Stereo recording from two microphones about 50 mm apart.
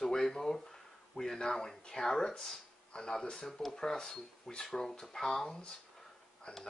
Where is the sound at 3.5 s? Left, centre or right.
Centre.